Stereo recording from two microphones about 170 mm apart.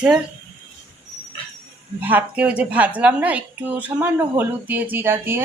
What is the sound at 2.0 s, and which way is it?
A woman's voice, 10° right (ahead or behind).